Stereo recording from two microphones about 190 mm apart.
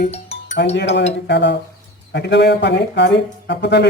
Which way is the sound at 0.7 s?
65° left (ahead or behind).